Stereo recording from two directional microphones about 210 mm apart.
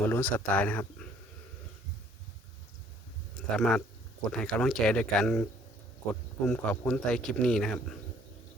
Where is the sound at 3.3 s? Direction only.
Centre (ahead or behind).